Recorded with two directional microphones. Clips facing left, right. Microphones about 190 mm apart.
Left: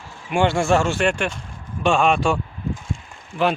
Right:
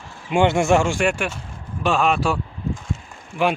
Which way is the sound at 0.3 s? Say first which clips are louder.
Right 2 dB; 20° right (ahead or behind).